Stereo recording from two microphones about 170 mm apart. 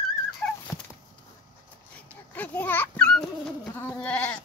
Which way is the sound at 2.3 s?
10° left (ahead or behind).